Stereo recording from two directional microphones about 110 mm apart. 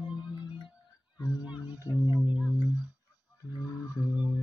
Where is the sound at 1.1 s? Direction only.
40° left (ahead or behind).